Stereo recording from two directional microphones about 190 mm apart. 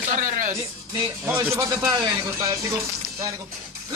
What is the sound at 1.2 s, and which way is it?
Speech, 15° right (ahead or behind).